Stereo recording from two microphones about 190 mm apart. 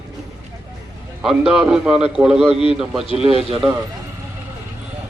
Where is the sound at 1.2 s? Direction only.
Centre (ahead or behind).